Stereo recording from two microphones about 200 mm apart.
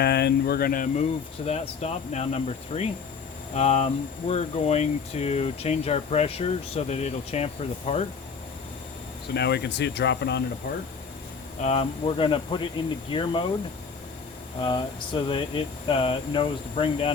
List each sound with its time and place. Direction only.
0.0 s speech: 55° left (ahead or behind); by 8.0 s 30° left (ahead or behind)
9.3 s speech: 55° left (ahead or behind)
11.6 s speech: 30° left (ahead or behind)
14.6 s speech: 25° left (ahead or behind)